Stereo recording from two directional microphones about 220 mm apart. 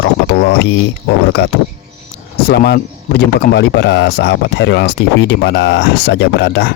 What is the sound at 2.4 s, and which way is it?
Speech, 45° left (ahead or behind).